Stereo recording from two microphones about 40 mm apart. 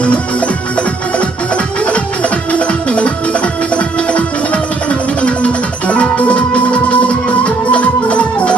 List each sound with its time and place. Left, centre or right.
0.0 s music: left